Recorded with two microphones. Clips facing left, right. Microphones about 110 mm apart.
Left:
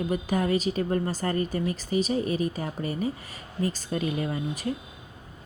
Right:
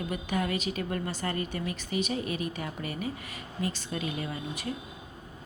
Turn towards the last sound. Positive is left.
turn(degrees=40)  # may be behind; listen again after turning